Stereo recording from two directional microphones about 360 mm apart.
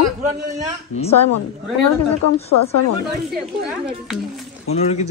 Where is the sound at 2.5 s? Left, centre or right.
Left.